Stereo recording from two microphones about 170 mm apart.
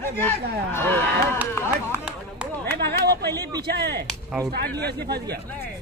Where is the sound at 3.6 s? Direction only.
70° right (ahead or behind).